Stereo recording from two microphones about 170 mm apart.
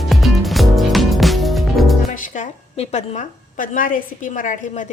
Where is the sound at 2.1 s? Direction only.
50° left (ahead or behind).